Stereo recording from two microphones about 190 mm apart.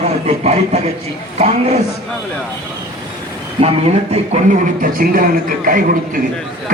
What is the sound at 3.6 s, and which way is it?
Speech, 35° right (ahead or behind).